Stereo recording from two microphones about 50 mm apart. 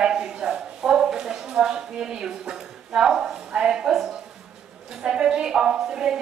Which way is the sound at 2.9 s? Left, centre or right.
Centre.